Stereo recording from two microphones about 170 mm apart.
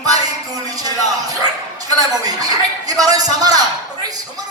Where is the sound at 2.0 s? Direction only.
20° right (ahead or behind).